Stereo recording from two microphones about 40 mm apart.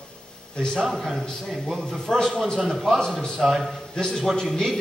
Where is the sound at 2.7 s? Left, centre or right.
Centre.